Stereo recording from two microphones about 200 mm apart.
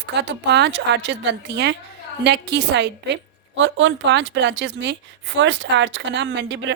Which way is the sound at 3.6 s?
70° right (ahead or behind).